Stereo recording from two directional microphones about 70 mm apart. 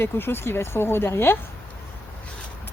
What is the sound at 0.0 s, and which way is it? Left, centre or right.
Speech, left.